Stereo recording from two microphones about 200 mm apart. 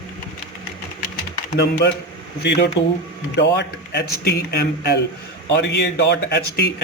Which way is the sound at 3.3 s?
60° left (ahead or behind).